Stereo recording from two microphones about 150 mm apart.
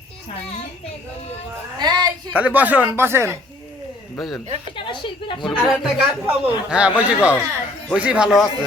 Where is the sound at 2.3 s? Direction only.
10° right (ahead or behind).